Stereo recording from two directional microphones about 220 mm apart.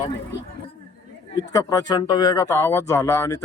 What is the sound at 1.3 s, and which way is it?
A man's voice, 15° left (ahead or behind).